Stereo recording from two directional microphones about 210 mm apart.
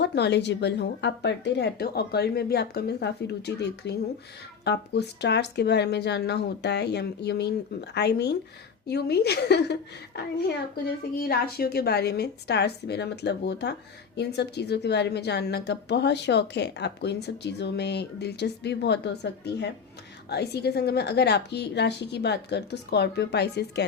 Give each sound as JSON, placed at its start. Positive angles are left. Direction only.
{"t": 0.0, "sound": "a woman's voice", "side_deg": 55}